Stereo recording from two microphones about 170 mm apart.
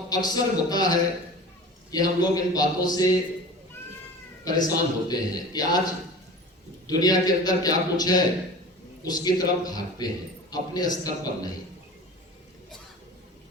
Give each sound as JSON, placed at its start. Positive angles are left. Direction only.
{"t": 0.1, "sound": "a man's voice", "side_deg": 25}
{"t": 4.4, "sound": "a man's voice", "side_deg": 25}
{"t": 6.8, "sound": "a man's voice", "side_deg": 25}